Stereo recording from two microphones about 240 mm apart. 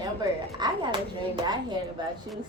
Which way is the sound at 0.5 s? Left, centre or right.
Centre.